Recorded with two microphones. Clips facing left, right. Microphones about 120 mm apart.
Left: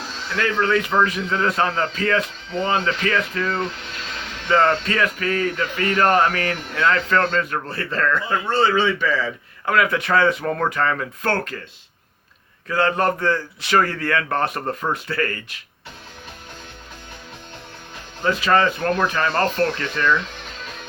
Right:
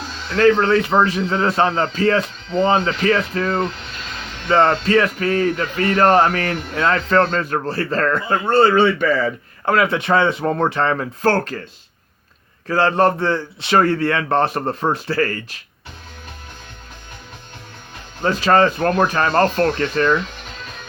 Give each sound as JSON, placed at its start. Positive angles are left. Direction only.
{"t": 0.3, "sound": "speech", "side_deg": -30}
{"t": 9.6, "sound": "a man's voice", "side_deg": -30}
{"t": 12.6, "sound": "a man's voice", "side_deg": -30}
{"t": 18.2, "sound": "speech", "side_deg": -40}